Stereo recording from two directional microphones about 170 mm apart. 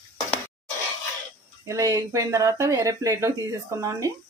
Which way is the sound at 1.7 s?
20° right (ahead or behind).